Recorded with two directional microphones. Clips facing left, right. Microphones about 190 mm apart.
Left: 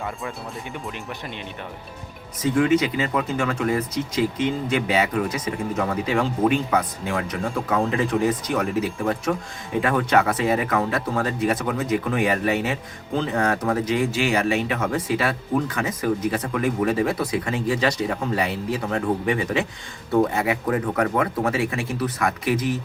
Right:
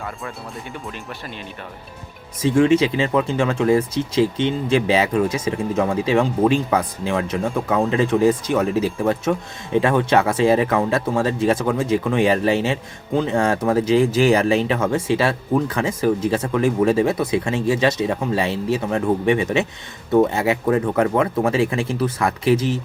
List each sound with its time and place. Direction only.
2.4 s speech: 25° right (ahead or behind)